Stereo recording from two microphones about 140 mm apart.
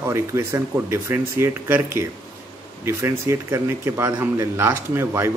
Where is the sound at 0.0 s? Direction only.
20° right (ahead or behind).